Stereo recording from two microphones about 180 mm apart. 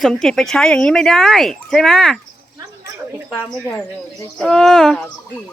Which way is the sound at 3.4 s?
5° left (ahead or behind).